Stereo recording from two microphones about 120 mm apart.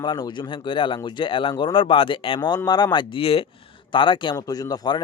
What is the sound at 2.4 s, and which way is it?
Speech, 35° left (ahead or behind).